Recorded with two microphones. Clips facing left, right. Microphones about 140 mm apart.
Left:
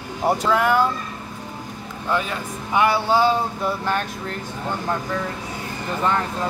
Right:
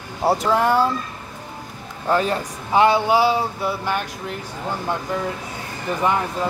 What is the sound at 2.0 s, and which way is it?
Speech, 40° right (ahead or behind).